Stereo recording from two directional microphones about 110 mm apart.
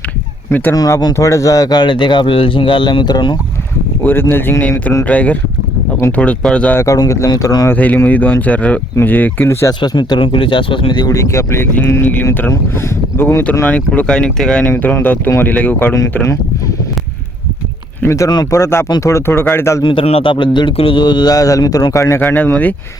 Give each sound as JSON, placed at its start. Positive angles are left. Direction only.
{"t": 0.7, "sound": "speech", "side_deg": 30}
{"t": 4.0, "sound": "speech", "side_deg": 20}
{"t": 6.7, "sound": "speech", "side_deg": 30}
{"t": 7.7, "sound": "speech", "side_deg": 15}
{"t": 9.8, "sound": "speech", "side_deg": 40}
{"t": 11.1, "sound": "speech", "side_deg": 30}
{"t": 14.7, "sound": "speech", "side_deg": 20}
{"t": 18.0, "sound": "speech", "side_deg": 25}
{"t": 19.8, "sound": "speech", "side_deg": 45}
{"t": 22.2, "sound": "speech", "side_deg": 20}